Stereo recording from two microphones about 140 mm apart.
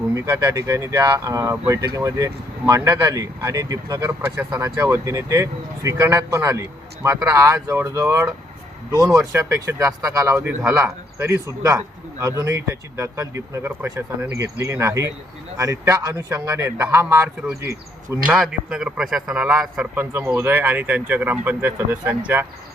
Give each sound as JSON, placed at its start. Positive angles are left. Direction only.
{"t": 0.1, "sound": "speech", "side_deg": -20}
{"t": 18.3, "sound": "a man's voice", "side_deg": 0}